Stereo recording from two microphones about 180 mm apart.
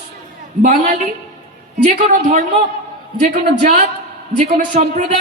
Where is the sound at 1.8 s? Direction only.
40° right (ahead or behind).